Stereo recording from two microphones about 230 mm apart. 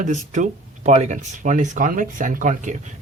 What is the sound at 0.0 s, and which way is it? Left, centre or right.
Speech, right.